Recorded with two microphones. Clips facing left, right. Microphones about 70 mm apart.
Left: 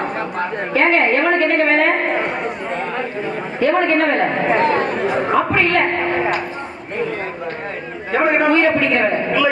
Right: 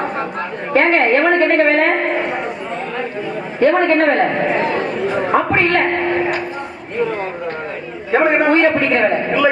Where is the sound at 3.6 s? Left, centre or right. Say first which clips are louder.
Right 3 dB; right.